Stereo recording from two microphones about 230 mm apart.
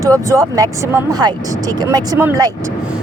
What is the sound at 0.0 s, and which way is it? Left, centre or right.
A woman's voice, centre.